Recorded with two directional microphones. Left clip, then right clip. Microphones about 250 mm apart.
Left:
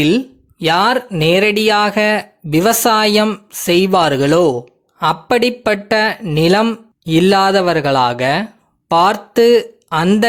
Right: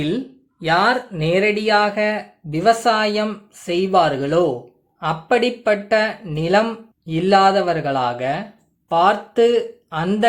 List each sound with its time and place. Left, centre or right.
0.6 s speech: left